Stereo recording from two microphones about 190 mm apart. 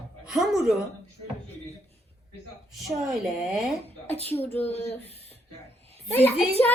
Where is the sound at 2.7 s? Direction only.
Centre (ahead or behind).